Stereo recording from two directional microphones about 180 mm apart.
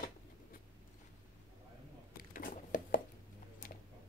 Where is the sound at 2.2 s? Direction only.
50° left (ahead or behind).